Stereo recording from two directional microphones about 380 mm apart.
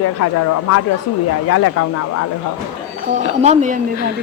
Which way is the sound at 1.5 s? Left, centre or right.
Left.